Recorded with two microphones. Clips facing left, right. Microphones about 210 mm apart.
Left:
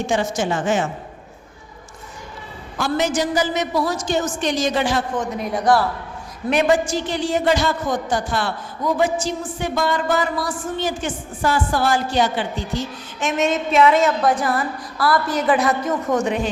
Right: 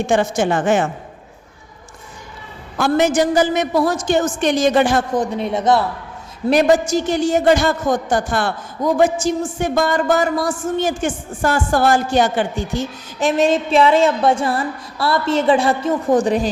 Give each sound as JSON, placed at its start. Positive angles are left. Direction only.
{"t": 0.1, "sound": "a woman's voice", "side_deg": -55}
{"t": 2.7, "sound": "a woman's voice", "side_deg": -55}
{"t": 5.1, "sound": "a woman's voice", "side_deg": -30}
{"t": 6.5, "sound": "a woman's voice", "side_deg": -40}
{"t": 13.2, "sound": "a woman's voice", "side_deg": -35}